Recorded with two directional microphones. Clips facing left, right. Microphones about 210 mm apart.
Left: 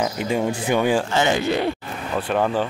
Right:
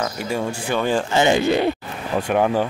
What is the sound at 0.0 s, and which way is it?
Speech, 20° left (ahead or behind).